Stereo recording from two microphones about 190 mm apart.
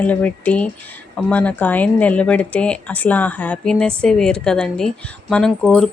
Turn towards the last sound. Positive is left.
turn(degrees=5)  # may be behind; listen again after turning